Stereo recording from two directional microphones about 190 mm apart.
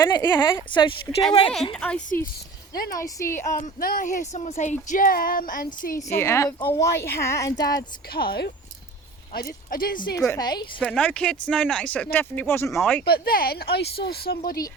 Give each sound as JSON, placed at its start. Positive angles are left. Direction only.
{"t": 0.0, "sound": "speech", "side_deg": 20}
{"t": 1.7, "sound": "speech", "side_deg": 5}
{"t": 2.7, "sound": "speech", "side_deg": 55}
{"t": 3.0, "sound": "speech", "side_deg": 15}
{"t": 3.6, "sound": "speech", "side_deg": 50}
{"t": 6.0, "sound": "speech", "side_deg": 15}
{"t": 7.8, "sound": "speech", "side_deg": 55}
{"t": 10.2, "sound": "speech", "side_deg": 20}
{"t": 10.8, "sound": "speech", "side_deg": 5}
{"t": 13.1, "sound": "speech", "side_deg": 55}